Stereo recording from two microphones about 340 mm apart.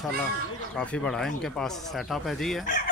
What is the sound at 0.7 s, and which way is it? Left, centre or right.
Speech, centre.